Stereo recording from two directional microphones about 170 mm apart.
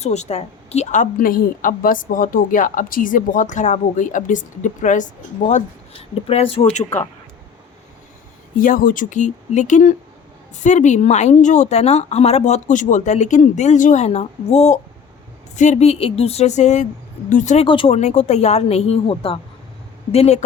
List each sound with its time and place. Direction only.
0.0 s a woman's voice: 40° left (ahead or behind)
8.5 s a woman's voice: 55° left (ahead or behind)
17.7 s a woman's voice: 35° left (ahead or behind)